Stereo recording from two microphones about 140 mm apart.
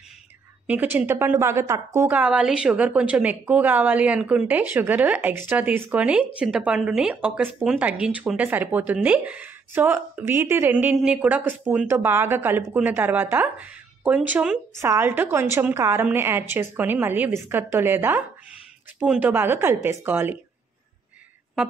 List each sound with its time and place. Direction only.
0.7 s a woman's voice: 10° right (ahead or behind)